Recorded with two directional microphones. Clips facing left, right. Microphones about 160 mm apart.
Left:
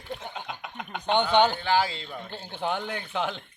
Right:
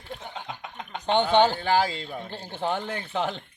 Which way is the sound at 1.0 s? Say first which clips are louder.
Right 1 dB; 30° right (ahead or behind).